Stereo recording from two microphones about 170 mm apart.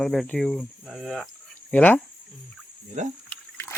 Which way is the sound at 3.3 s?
15° left (ahead or behind).